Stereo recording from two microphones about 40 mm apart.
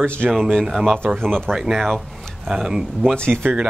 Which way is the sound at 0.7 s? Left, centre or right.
Centre.